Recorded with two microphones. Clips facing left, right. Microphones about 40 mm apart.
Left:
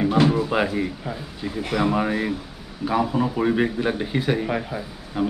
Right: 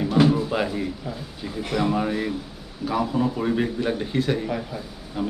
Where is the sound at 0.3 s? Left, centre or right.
Centre.